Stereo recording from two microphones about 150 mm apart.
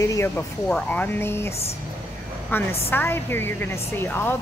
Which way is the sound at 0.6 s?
10° left (ahead or behind).